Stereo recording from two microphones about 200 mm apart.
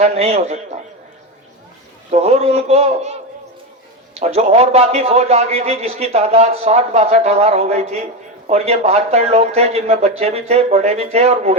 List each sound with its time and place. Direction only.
0.0 s a man's voice: 30° right (ahead or behind)
2.0 s a man's voice: 30° right (ahead or behind)